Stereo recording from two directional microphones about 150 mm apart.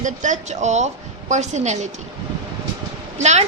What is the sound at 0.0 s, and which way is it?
A woman's voice, 55° right (ahead or behind).